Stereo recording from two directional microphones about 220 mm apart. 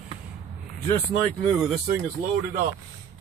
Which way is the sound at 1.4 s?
Centre (ahead or behind).